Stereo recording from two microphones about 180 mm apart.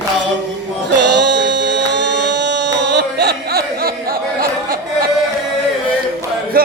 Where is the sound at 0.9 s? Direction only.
75° right (ahead or behind); by 5.1 s 55° right (ahead or behind).